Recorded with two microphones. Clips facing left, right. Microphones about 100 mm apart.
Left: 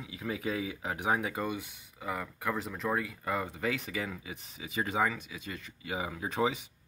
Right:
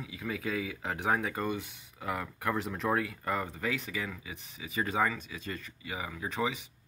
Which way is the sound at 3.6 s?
20° left (ahead or behind).